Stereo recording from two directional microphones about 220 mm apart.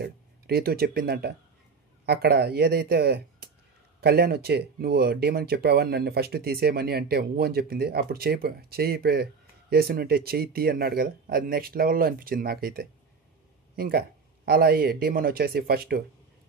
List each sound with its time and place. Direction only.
0.0 s speech: 45° right (ahead or behind)